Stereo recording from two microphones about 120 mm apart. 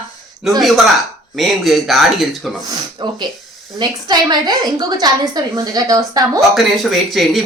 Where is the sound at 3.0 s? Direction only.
40° right (ahead or behind).